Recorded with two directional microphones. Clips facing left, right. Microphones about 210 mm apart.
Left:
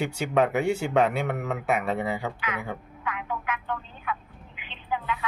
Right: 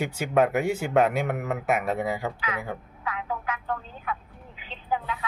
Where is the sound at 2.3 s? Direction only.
35° right (ahead or behind).